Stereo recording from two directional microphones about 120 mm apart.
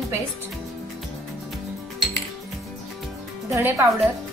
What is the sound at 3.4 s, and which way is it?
Speech, 25° right (ahead or behind).